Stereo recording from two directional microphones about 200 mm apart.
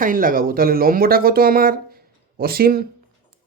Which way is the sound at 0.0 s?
45° right (ahead or behind).